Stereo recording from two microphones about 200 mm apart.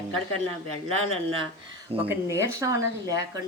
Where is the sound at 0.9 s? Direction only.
30° right (ahead or behind).